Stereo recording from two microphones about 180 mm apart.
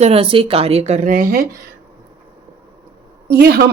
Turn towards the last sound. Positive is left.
turn(degrees=-60)  # may be behind; listen again after turning